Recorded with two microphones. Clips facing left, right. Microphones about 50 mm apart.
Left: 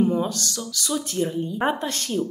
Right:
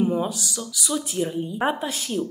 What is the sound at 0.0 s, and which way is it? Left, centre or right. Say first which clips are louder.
A woman's voice: left 1 dB; centre.